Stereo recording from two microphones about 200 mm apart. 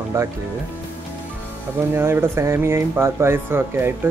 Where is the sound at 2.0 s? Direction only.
10° right (ahead or behind).